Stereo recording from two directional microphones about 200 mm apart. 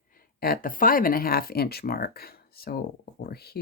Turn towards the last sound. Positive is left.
turn(degrees=50)  # may be behind; listen again after turning